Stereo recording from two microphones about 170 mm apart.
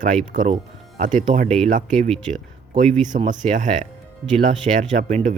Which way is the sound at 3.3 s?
45° right (ahead or behind).